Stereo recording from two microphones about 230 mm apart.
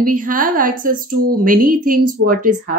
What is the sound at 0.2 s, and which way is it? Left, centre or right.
Speech, right.